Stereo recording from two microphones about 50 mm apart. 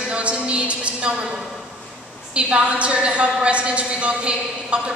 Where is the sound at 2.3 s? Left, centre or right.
Right.